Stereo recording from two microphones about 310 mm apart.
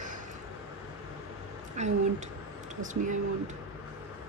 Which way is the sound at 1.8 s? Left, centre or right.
Right.